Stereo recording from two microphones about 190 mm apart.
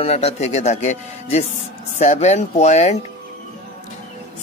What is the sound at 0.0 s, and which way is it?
Speech, 30° left (ahead or behind).